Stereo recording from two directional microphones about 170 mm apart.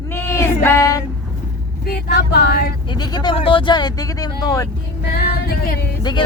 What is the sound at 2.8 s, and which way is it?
Speech, 25° left (ahead or behind).